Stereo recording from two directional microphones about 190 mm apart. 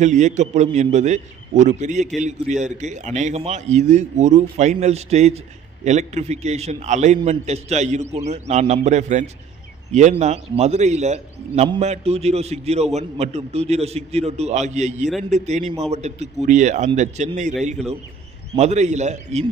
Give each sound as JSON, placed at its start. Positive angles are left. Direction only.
{"t": 0.0, "sound": "a man's voice", "side_deg": -40}